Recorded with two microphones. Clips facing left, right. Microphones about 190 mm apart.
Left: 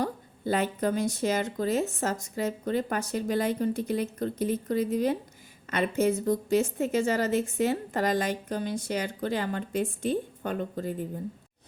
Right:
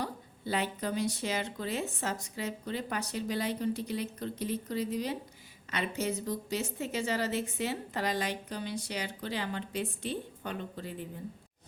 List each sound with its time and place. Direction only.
0.0 s a woman's voice: 45° left (ahead or behind)